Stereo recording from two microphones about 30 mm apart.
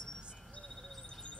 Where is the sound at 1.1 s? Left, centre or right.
Left.